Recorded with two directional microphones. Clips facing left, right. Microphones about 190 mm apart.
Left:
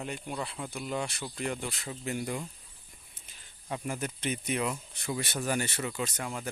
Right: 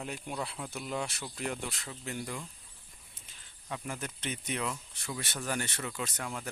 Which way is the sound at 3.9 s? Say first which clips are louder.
Left 6 dB; 10° left (ahead or behind).